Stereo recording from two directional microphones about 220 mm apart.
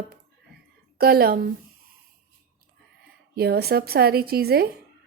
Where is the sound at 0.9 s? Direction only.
45° right (ahead or behind).